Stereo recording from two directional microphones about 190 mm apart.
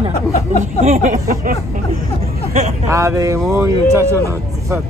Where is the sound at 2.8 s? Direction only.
15° right (ahead or behind).